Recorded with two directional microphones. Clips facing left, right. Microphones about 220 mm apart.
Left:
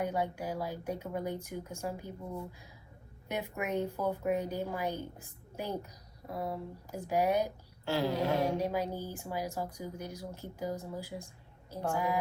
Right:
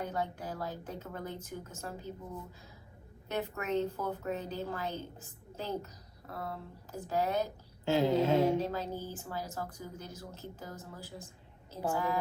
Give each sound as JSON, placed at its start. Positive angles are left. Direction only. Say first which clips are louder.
{"t": 0.0, "sound": "a woman's voice", "louder": "left 3 dB", "side_deg": 10}
{"t": 7.9, "sound": "a sound", "louder": "right 3 dB", "side_deg": -20}
{"t": 8.4, "sound": "a woman's voice", "louder": "even", "side_deg": 15}